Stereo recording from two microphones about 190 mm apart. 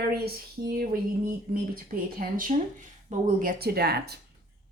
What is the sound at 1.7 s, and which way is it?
A woman's voice, 50° right (ahead or behind).